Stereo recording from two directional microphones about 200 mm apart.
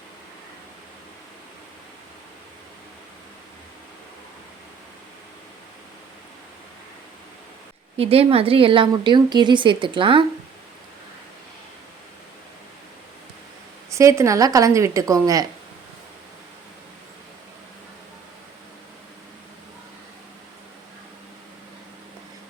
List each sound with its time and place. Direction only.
7.9 s speech: 30° right (ahead or behind)
13.9 s a woman's voice: 15° right (ahead or behind)